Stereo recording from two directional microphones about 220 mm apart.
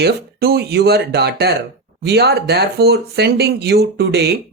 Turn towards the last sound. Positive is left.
turn(degrees=-45)  # may be behind; listen again after turning